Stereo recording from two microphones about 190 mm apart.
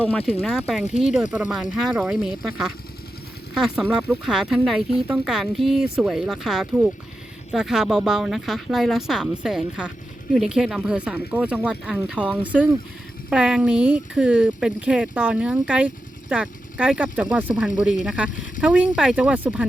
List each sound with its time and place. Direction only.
0.0 s speech: 5° left (ahead or behind)
0.9 s speech: 40° left (ahead or behind)
1.1 s speech: 5° right (ahead or behind)